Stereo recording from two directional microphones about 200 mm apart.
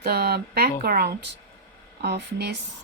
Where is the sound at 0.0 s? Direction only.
50° right (ahead or behind).